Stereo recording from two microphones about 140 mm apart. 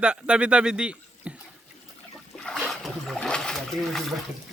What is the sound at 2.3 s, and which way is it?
Splash, 5° left (ahead or behind).